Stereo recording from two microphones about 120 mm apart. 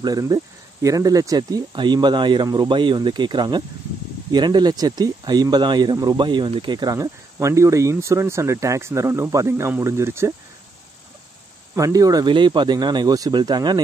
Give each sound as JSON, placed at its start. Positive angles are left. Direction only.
{"t": 0.0, "sound": "speech", "side_deg": -30}
{"t": 11.7, "sound": "speech", "side_deg": -30}